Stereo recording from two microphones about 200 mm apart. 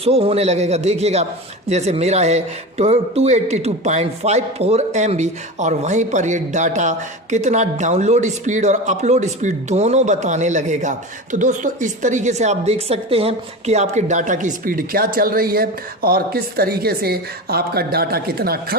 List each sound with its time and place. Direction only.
0.0 s a man's voice: 30° right (ahead or behind); by 18.8 s 50° right (ahead or behind)